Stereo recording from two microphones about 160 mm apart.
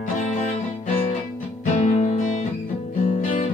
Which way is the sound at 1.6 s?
50° left (ahead or behind).